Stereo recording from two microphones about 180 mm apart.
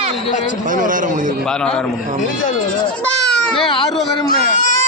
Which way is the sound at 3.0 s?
5° left (ahead or behind).